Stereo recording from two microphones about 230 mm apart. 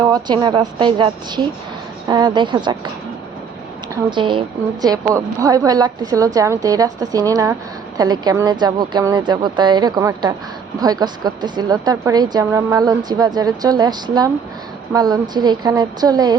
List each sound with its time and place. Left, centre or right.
0.0 s a woman's voice: centre
4.1 s a woman's voice: right